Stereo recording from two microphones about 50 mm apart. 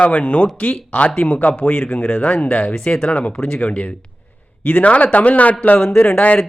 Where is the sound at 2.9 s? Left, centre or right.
Centre.